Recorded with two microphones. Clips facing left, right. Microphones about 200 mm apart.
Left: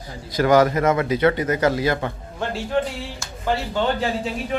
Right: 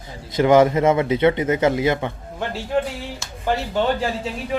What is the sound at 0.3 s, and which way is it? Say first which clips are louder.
Speech: right 2 dB; 25° right (ahead or behind).